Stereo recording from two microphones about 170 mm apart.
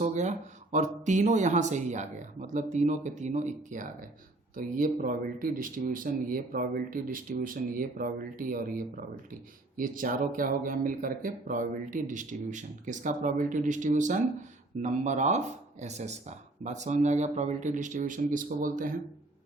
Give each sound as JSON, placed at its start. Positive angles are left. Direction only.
{"t": 0.0, "sound": "speech", "side_deg": -45}